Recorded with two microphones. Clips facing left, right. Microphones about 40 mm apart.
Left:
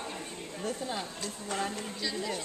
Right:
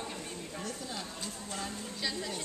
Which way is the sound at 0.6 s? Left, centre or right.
Left.